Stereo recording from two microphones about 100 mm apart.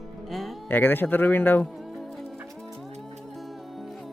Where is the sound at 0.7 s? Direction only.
20° left (ahead or behind).